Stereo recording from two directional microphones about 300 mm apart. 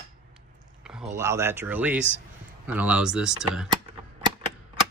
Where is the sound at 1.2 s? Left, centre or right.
Centre.